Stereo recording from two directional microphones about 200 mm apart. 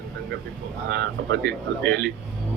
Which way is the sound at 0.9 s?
55° right (ahead or behind).